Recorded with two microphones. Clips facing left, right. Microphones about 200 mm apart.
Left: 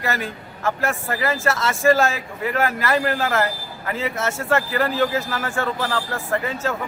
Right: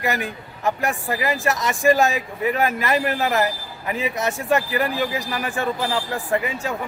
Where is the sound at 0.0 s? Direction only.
15° right (ahead or behind).